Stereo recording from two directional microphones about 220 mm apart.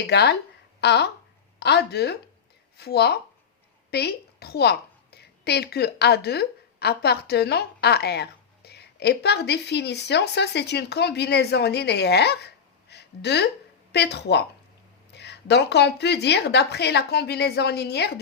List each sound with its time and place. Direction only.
0.1 s a woman's voice: 50° left (ahead or behind)
12.9 s a sound: 50° left (ahead or behind)
13.9 s speech: 50° left (ahead or behind)